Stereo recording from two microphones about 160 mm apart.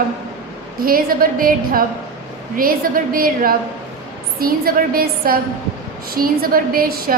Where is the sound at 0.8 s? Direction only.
65° right (ahead or behind).